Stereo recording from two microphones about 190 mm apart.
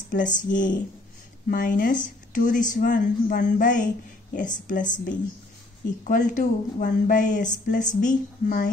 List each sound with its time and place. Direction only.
0.1 s speech: 40° left (ahead or behind)
6.0 s speech: 40° left (ahead or behind)